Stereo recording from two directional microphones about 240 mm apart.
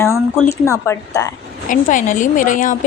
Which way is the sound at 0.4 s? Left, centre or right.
Centre.